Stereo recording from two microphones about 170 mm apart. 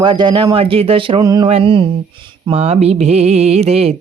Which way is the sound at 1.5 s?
30° right (ahead or behind).